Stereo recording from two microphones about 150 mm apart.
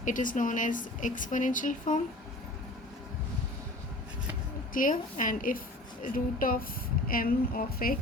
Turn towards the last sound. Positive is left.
turn(degrees=75)  # may be behind; listen again after turning